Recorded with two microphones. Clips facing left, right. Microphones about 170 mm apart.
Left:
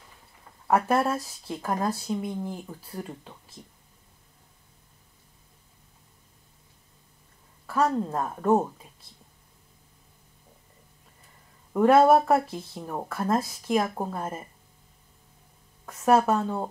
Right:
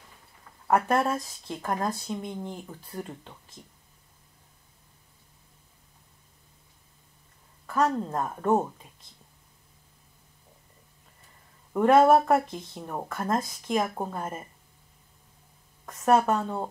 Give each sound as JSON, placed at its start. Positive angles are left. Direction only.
{"t": 0.7, "sound": "speech", "side_deg": 5}
{"t": 7.6, "sound": "speech", "side_deg": 5}
{"t": 11.7, "sound": "speech", "side_deg": 0}
{"t": 15.8, "sound": "speech", "side_deg": 5}